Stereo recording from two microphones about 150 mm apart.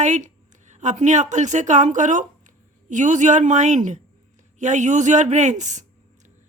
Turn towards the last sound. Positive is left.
turn(degrees=-55)  # may be behind; listen again after turning